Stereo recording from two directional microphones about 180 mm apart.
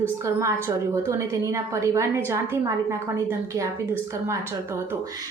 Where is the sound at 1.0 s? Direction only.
15° right (ahead or behind).